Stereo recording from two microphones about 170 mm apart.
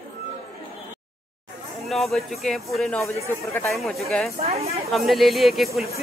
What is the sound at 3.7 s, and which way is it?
Speech, centre (ahead or behind).